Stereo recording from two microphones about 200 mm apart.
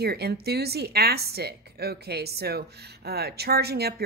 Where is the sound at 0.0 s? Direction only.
55° right (ahead or behind).